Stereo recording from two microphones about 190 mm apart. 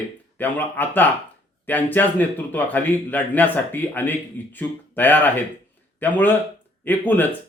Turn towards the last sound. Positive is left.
turn(degrees=10)  # may be behind; listen again after turning